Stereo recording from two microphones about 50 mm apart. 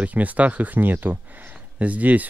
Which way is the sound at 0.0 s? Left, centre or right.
Right.